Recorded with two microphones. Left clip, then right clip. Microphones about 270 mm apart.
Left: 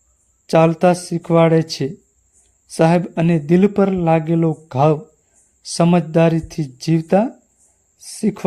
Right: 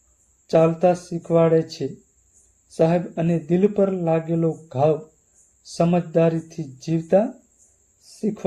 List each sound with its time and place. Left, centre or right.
0.4 s speech: left